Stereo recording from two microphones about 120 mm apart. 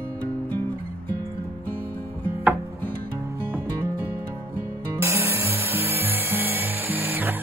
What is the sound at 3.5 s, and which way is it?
Music, 20° right (ahead or behind).